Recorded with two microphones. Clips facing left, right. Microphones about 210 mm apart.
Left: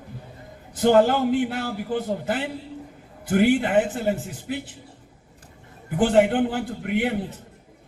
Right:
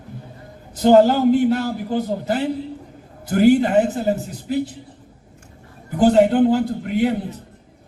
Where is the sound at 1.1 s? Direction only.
40° right (ahead or behind).